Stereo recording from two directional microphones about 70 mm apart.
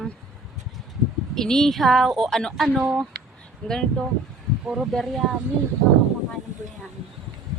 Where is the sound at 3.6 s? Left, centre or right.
Centre.